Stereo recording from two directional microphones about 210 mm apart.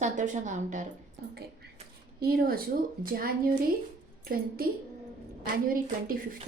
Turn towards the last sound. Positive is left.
turn(degrees=-45)  # may be behind; listen again after turning